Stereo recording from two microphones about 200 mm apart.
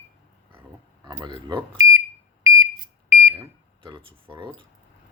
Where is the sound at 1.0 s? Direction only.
20° right (ahead or behind).